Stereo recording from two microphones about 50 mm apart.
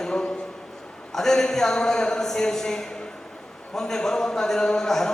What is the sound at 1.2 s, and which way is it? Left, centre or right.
A man's voice, centre.